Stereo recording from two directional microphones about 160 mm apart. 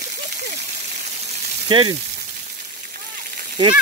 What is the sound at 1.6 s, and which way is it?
Speech, 30° right (ahead or behind).